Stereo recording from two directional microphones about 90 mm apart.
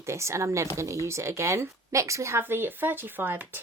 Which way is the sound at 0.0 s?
30° right (ahead or behind).